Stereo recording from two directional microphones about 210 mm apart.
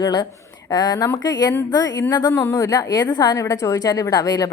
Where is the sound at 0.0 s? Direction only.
20° left (ahead or behind).